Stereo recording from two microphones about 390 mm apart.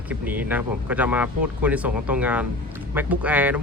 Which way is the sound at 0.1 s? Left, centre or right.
Centre.